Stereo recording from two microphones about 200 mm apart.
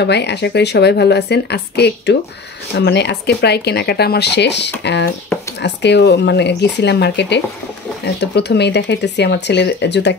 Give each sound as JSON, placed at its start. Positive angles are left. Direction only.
{"t": 0.0, "sound": "speech", "side_deg": 55}